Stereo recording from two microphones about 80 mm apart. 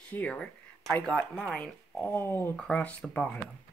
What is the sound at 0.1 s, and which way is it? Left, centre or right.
Speech, centre.